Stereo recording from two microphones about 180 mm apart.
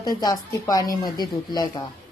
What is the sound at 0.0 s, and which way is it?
Speech, 20° left (ahead or behind).